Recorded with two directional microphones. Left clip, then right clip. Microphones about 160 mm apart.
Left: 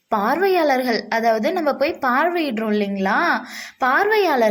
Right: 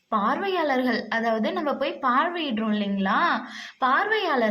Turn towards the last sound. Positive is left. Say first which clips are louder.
# left 6 dB
turn(degrees=25)  # may be behind; listen again after turning